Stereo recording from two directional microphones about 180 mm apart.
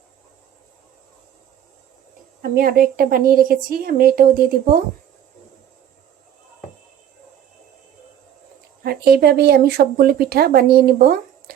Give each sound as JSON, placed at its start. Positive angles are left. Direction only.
{"t": 2.4, "sound": "a woman's voice", "side_deg": -55}
{"t": 8.8, "sound": "speech", "side_deg": -60}